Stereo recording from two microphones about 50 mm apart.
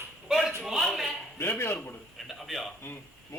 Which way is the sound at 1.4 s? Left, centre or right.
Left.